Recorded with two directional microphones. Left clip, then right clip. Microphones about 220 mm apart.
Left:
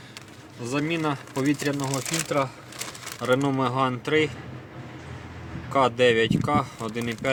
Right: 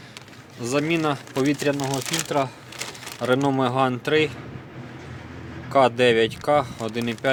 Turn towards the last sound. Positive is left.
turn(degrees=-30)  # may be behind; listen again after turning